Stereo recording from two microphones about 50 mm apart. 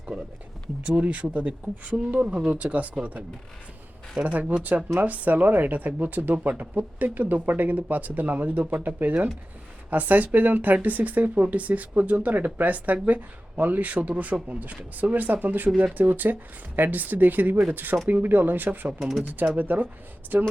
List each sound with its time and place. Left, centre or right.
0.1 s speech: centre
0.9 s speech: right
4.4 s speech: right
18.9 s speech: centre
19.5 s speech: right